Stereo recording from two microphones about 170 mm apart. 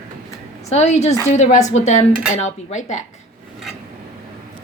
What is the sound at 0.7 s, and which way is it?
Speech, 40° left (ahead or behind).